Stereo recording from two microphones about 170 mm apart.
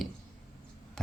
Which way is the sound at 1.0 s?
5° left (ahead or behind).